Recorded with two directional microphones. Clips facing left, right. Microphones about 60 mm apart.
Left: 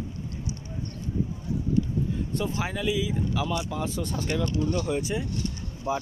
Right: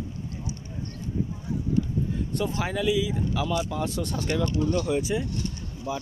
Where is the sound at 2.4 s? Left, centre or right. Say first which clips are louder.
Right 3 dB; centre.